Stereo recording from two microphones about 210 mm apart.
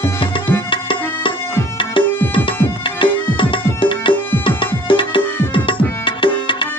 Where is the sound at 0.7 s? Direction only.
25° left (ahead or behind).